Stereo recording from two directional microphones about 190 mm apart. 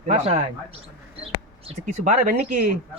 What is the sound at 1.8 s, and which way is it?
Speech, 45° right (ahead or behind).